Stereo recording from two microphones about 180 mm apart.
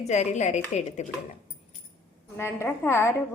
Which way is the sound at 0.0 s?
40° left (ahead or behind).